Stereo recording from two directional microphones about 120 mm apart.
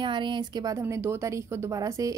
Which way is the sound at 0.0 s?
40° right (ahead or behind).